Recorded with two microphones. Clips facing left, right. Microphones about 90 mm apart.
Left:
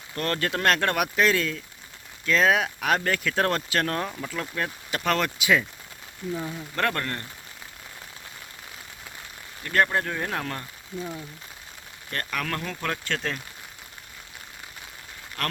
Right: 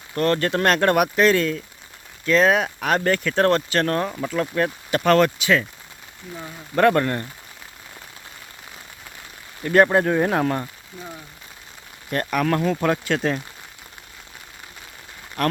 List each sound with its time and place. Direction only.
0.1 s speech: centre (ahead or behind)
6.7 s speech: 15° right (ahead or behind)
9.6 s speech: 20° right (ahead or behind)
12.1 s speech: 15° right (ahead or behind)
15.4 s speech: 20° right (ahead or behind)